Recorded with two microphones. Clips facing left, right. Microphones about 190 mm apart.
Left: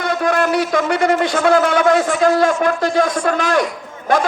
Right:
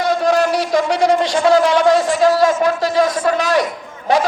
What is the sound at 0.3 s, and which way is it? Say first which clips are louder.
A man's voice: left 1 dB; 55° left (ahead or behind).